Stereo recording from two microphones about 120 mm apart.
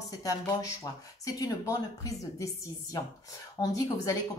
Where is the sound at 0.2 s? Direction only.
30° left (ahead or behind).